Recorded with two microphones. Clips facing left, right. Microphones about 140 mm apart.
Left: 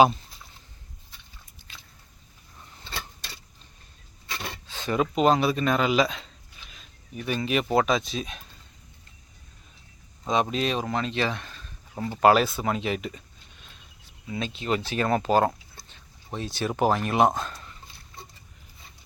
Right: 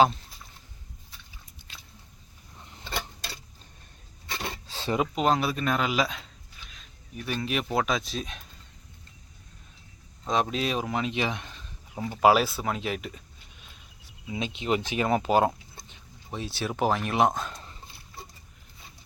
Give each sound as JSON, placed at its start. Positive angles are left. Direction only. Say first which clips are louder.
{"t": 4.6, "sound": "a sound", "louder": "even", "side_deg": -35}
{"t": 5.1, "sound": "speech", "louder": "left 7 dB", "side_deg": 0}
{"t": 10.2, "sound": "speech", "louder": "left 2 dB", "side_deg": 0}
{"t": 11.9, "sound": "speech", "louder": "left 1 dB", "side_deg": -5}
{"t": 14.3, "sound": "speech", "louder": "even", "side_deg": -15}